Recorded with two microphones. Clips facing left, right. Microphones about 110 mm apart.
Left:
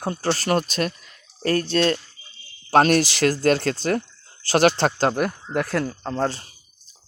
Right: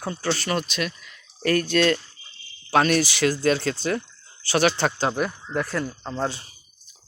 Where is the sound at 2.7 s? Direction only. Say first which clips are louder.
Left 3 dB; 40° left (ahead or behind).